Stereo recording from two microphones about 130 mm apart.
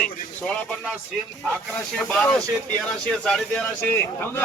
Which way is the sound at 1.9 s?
5° left (ahead or behind).